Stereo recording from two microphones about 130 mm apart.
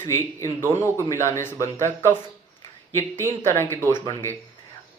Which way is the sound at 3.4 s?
20° left (ahead or behind).